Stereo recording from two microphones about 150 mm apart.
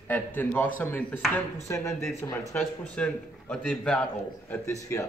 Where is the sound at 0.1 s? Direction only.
15° left (ahead or behind).